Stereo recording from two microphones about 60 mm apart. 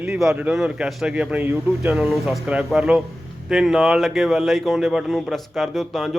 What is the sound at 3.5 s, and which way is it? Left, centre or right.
Speech, centre.